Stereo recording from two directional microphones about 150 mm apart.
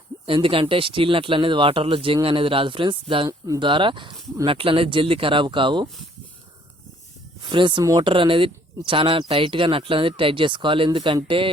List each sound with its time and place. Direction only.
0.3 s speech: 35° right (ahead or behind)
3.2 s speech: 25° right (ahead or behind)
7.4 s speech: 30° right (ahead or behind)